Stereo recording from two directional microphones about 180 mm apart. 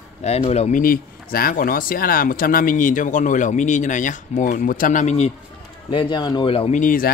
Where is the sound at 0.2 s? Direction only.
35° left (ahead or behind).